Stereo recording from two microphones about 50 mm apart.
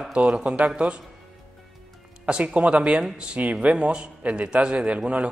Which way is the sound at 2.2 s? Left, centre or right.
Right.